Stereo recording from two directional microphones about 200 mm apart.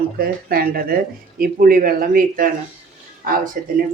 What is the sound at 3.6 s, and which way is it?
Speech, 45° right (ahead or behind).